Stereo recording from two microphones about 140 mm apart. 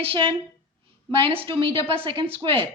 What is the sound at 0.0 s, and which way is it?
Speech, 40° right (ahead or behind).